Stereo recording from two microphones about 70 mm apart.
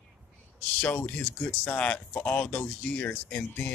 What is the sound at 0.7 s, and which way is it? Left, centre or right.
Speech, centre.